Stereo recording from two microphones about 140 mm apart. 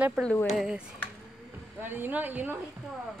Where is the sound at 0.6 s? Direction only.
5° right (ahead or behind).